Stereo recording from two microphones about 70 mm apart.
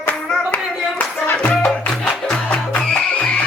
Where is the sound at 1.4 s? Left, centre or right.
Centre.